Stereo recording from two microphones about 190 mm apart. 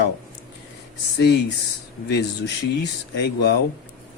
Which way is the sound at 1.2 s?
60° left (ahead or behind).